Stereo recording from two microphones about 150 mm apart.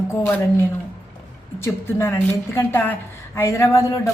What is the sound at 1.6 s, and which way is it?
A woman's voice, 15° left (ahead or behind).